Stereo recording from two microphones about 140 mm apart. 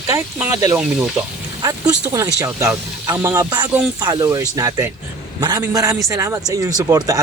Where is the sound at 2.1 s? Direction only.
20° right (ahead or behind).